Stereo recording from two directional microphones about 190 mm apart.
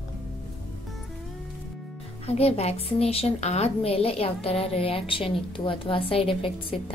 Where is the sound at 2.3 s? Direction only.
35° left (ahead or behind).